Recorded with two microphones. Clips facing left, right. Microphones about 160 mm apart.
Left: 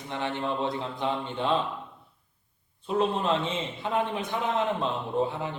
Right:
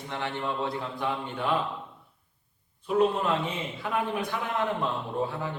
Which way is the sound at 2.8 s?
25° left (ahead or behind).